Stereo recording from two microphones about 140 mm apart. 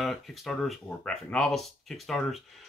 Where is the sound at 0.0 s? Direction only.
Centre (ahead or behind).